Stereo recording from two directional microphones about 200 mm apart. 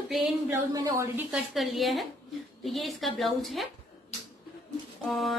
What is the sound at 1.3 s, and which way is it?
A woman's voice, centre (ahead or behind).